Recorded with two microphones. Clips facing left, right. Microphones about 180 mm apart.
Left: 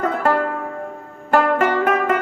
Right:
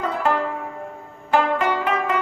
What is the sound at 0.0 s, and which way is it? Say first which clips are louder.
Music: left 3 dB; 50° left (ahead or behind).